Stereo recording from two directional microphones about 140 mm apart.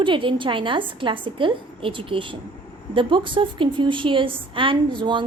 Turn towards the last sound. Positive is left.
turn(degrees=-35)  # may be behind; listen again after turning